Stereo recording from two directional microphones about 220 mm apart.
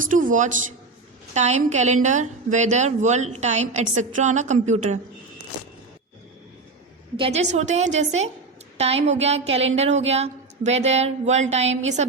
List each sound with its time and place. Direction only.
0.0 s a woman's voice: 35° right (ahead or behind)
7.2 s a woman's voice: 30° right (ahead or behind)